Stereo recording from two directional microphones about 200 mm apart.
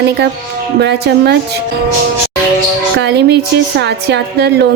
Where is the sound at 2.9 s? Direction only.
55° right (ahead or behind).